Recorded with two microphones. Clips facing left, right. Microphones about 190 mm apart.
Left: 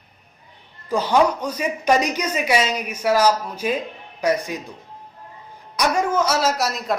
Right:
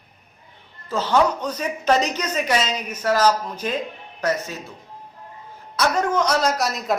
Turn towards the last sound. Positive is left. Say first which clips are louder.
# even
turn(degrees=0)  # may be behind; listen again after turning